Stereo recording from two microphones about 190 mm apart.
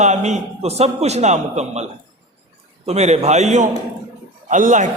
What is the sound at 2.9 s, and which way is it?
A man's voice, 35° right (ahead or behind).